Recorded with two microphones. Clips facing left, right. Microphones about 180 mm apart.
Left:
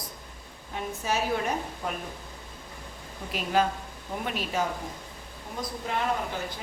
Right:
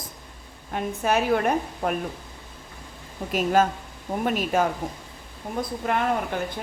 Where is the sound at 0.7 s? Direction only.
60° right (ahead or behind).